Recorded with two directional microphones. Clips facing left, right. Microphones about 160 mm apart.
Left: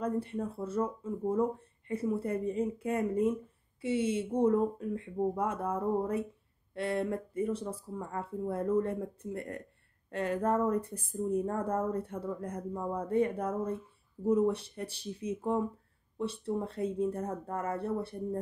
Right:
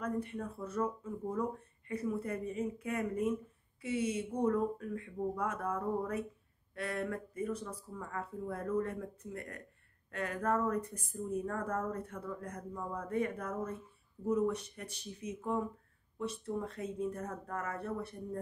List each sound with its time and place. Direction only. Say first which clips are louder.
0.0 s speech: left 4 dB; 30° left (ahead or behind)